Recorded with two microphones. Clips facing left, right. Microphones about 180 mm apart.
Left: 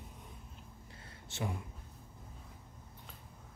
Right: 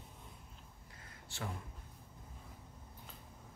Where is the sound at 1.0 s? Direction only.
20° left (ahead or behind).